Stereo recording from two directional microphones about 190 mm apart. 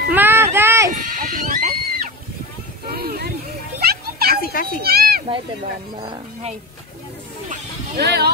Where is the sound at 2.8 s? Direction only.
55° right (ahead or behind).